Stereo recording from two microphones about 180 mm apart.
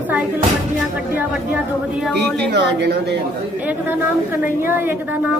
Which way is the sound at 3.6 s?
10° right (ahead or behind).